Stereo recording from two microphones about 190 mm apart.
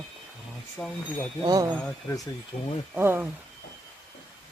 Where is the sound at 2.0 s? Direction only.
20° left (ahead or behind).